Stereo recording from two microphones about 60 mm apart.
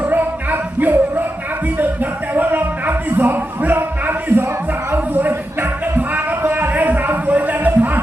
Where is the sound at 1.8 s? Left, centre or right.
Right.